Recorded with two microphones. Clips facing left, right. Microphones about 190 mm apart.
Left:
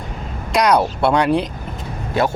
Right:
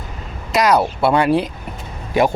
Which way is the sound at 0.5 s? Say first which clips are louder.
Even; centre (ahead or behind).